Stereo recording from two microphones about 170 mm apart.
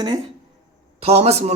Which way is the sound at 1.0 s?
40° right (ahead or behind).